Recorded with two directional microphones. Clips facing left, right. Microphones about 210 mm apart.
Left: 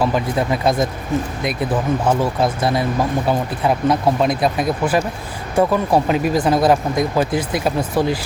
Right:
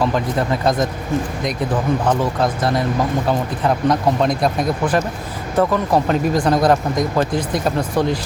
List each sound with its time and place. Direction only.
0.0 s speech: 10° left (ahead or behind)
2.0 s speech: 10° left (ahead or behind)
3.8 s speech: 5° left (ahead or behind)